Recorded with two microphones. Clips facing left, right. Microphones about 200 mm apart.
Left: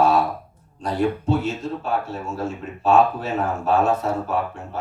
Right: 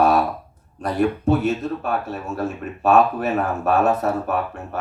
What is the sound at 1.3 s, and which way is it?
Speech, 60° right (ahead or behind).